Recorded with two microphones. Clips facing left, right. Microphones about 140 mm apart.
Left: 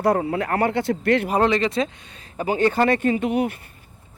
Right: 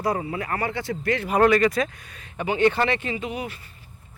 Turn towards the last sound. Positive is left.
turn(degrees=60)  # may be behind; listen again after turning